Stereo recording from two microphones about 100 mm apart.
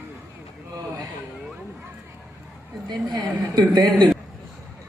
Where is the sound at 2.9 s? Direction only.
45° right (ahead or behind).